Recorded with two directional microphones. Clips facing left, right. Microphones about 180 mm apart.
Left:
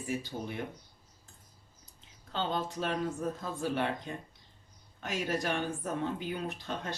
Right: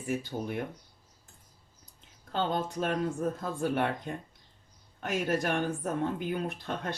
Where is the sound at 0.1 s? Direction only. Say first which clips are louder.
Right 4 dB; 50° right (ahead or behind).